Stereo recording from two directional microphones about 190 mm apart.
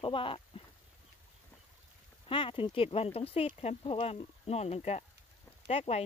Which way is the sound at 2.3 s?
25° left (ahead or behind).